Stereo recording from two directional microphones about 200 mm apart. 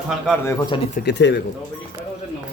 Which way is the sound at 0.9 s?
55° left (ahead or behind).